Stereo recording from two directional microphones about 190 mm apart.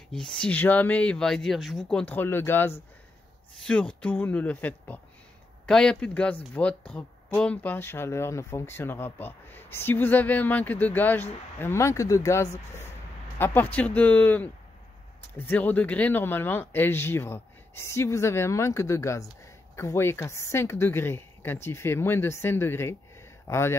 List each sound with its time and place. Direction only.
0.1 s speech: 5° left (ahead or behind)